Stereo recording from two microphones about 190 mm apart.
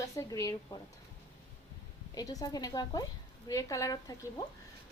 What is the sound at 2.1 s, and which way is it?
A woman's voice, 20° left (ahead or behind).